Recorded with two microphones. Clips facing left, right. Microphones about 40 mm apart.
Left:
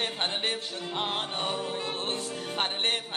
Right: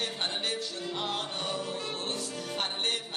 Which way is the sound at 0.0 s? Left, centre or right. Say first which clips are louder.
Left 3 dB; left.